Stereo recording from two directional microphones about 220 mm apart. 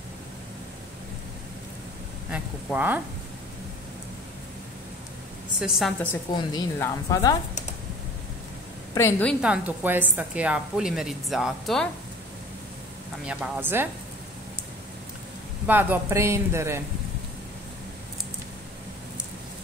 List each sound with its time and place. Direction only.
2.3 s speech: 10° right (ahead or behind)
5.6 s a woman's voice: centre (ahead or behind)
6.3 s a woman's voice: 20° left (ahead or behind)
8.9 s a woman's voice: 10° left (ahead or behind)
13.3 s speech: 5° right (ahead or behind)
15.6 s speech: 10° right (ahead or behind)